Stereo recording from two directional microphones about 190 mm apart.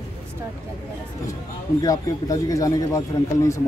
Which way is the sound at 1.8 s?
20° left (ahead or behind).